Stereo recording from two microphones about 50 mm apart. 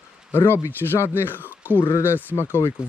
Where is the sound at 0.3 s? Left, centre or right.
Left.